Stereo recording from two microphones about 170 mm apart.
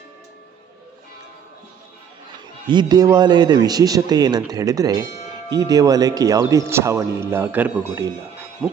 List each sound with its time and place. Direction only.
2.6 s speech: 25° right (ahead or behind)
8.6 s ratchet: 10° right (ahead or behind)